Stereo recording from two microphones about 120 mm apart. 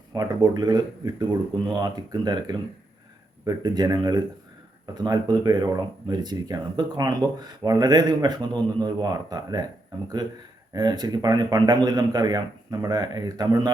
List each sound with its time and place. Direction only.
0.1 s a man's voice: 30° right (ahead or behind)
10.8 s a man's voice: 35° right (ahead or behind)